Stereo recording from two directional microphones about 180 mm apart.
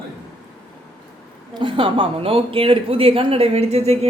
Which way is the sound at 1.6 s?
30° right (ahead or behind).